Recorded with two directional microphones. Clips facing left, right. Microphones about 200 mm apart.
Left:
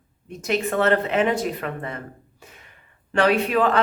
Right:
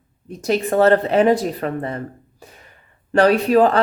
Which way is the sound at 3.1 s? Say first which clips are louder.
Right 5 dB; 40° right (ahead or behind).